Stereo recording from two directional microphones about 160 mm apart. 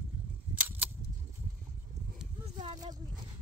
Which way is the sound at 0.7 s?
10° right (ahead or behind).